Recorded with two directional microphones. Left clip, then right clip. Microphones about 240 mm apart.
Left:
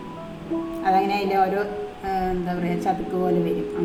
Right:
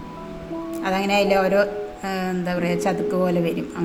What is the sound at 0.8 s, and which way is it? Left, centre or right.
A woman's voice, right.